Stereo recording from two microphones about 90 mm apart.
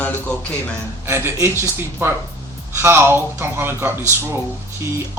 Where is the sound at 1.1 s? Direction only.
30° right (ahead or behind).